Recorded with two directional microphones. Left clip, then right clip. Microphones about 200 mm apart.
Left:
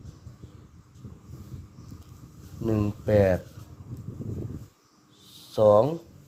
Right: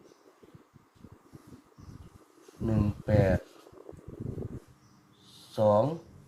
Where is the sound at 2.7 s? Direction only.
55° left (ahead or behind).